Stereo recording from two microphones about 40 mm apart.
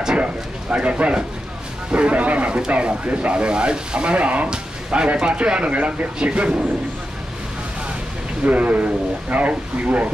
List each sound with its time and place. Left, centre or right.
0.2 s speech: right
4.5 s speech: right
8.5 s speech: right